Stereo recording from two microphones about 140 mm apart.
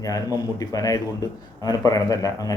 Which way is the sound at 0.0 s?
25° left (ahead or behind).